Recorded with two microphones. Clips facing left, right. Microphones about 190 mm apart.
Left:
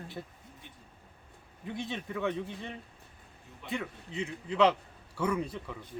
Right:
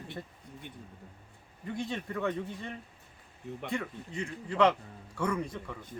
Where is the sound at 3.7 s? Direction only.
5° left (ahead or behind).